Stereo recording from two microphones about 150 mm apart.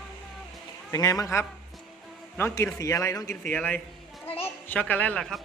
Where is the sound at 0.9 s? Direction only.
25° left (ahead or behind).